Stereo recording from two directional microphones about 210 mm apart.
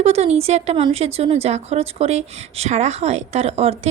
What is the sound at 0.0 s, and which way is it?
A woman's voice, 30° right (ahead or behind).